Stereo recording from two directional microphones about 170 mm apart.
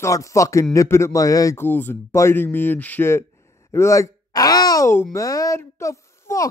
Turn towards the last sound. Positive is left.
turn(degrees=15)  # may be behind; listen again after turning